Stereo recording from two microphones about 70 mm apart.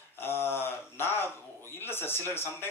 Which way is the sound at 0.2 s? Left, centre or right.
Left.